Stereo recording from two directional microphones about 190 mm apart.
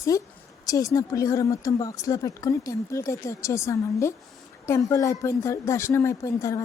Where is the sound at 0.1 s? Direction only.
15° left (ahead or behind).